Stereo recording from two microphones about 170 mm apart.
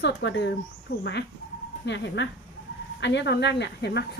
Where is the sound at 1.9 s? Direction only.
90° left.